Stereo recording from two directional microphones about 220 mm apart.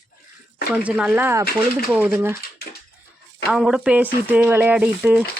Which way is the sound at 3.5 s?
5° right (ahead or behind).